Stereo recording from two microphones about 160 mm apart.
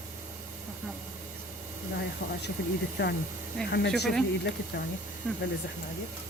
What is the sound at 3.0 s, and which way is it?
Speech, 90° left.